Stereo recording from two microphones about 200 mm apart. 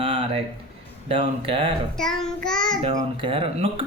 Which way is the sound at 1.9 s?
Centre (ahead or behind).